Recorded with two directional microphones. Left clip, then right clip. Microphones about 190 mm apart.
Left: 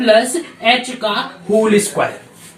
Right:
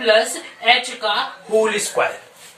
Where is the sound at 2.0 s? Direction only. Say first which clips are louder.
Left 2 dB; 15° right (ahead or behind).